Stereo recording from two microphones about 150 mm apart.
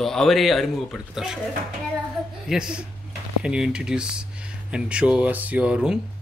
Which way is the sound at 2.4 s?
5° right (ahead or behind).